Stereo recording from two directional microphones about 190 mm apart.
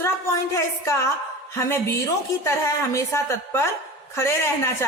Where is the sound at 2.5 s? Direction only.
15° left (ahead or behind).